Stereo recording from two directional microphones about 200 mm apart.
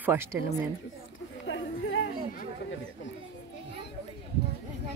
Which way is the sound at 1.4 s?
65° left (ahead or behind).